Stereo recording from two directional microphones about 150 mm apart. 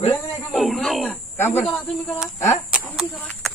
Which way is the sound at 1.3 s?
10° left (ahead or behind).